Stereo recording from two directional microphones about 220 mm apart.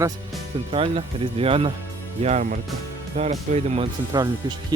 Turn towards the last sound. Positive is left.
turn(degrees=-20)  # may be behind; listen again after turning